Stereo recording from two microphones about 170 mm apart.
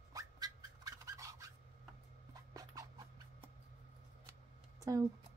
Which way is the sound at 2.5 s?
20° right (ahead or behind).